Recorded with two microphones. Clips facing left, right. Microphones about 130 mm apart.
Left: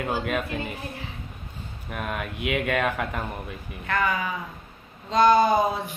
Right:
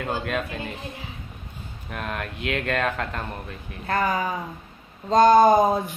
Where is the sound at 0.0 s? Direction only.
5° left (ahead or behind).